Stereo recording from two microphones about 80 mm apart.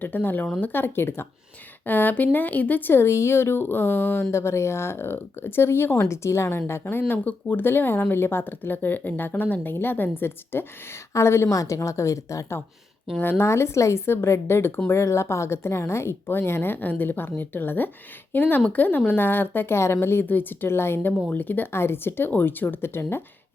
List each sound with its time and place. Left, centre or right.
0.0 s a woman's voice: left
13.1 s a woman's voice: left